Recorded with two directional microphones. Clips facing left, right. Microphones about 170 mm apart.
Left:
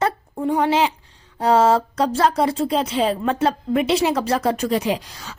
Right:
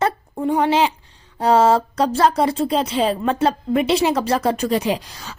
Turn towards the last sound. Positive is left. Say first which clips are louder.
# right 1 dB
turn(degrees=-35)  # may be behind; listen again after turning